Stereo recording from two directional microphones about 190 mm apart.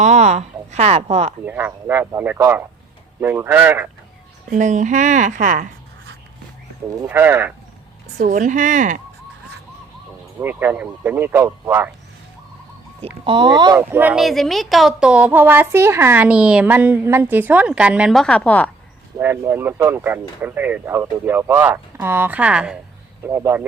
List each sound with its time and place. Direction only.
0.0 s speech: 35° right (ahead or behind)
1.5 s a woman's voice: 10° right (ahead or behind)
4.4 s speech: 40° right (ahead or behind)
6.9 s a woman's voice: 15° right (ahead or behind)
8.2 s speech: 45° right (ahead or behind)
10.4 s a woman's voice: 10° right (ahead or behind)
13.2 s speech: 25° right (ahead or behind)
13.9 s a woman's voice: 10° right (ahead or behind); by 18.7 s 5° left (ahead or behind)
19.2 s a woman's voice: 10° right (ahead or behind)